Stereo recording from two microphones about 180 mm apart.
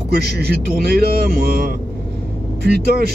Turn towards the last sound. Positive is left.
turn(degrees=-60)  # may be behind; listen again after turning